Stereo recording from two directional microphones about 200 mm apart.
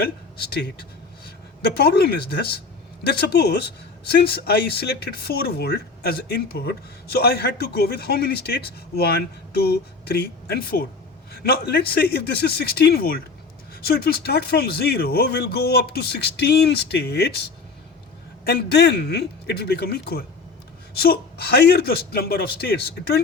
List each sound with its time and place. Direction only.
0.0 s a man's voice: 50° left (ahead or behind)